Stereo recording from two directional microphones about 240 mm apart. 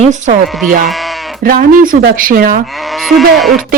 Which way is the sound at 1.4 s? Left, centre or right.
Right.